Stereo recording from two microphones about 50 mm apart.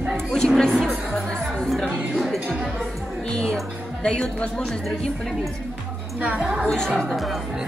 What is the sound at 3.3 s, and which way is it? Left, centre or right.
A woman's voice, centre.